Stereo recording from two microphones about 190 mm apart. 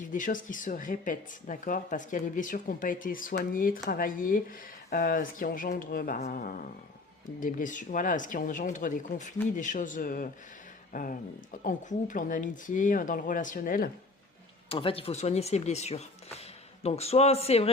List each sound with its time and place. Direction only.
0.1 s speech: 45° left (ahead or behind)
14.7 s speech: 30° left (ahead or behind)